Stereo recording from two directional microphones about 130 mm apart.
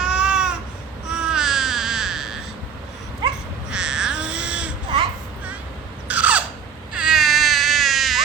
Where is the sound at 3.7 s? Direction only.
5° right (ahead or behind).